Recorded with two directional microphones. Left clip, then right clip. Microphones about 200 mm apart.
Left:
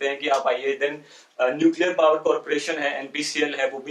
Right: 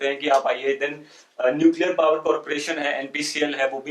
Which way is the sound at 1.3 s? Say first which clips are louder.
Right 2 dB; 10° right (ahead or behind).